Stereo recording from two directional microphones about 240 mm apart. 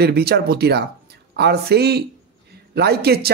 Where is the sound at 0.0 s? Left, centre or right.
Right.